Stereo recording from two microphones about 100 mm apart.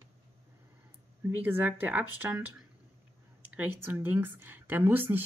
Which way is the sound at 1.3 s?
15° right (ahead or behind).